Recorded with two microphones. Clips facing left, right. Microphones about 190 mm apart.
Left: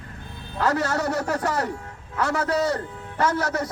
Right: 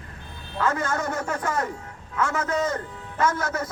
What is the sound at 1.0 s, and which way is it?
Speech, 35° left (ahead or behind).